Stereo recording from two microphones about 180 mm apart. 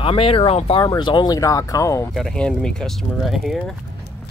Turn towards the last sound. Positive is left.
turn(degrees=0)  # may be behind; listen again after turning